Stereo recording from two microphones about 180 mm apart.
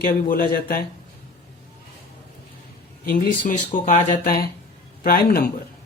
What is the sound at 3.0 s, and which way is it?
Speech, 50° left (ahead or behind).